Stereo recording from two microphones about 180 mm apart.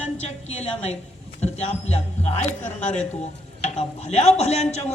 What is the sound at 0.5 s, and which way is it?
A man's voice, 35° left (ahead or behind).